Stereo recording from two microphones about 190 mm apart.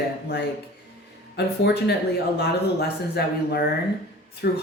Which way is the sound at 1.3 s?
60° left (ahead or behind).